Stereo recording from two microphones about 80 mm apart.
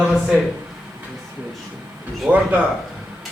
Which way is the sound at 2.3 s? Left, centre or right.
Right.